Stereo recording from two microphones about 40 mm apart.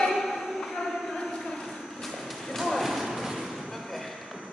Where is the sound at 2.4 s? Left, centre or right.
Centre.